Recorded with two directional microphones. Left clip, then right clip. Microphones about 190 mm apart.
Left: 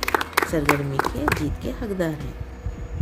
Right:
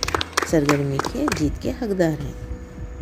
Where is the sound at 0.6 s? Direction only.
25° left (ahead or behind).